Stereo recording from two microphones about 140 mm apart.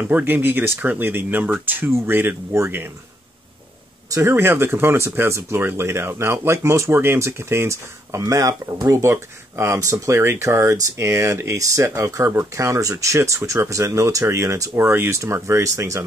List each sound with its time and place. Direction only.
0.0 s speech: 15° right (ahead or behind)
4.1 s speech: 20° right (ahead or behind)